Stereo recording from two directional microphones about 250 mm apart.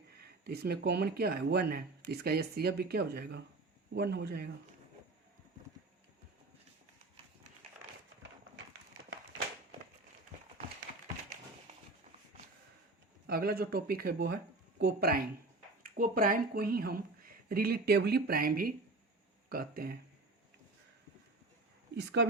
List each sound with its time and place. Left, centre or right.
0.4 s speech: right
13.2 s speech: right
21.9 s speech: right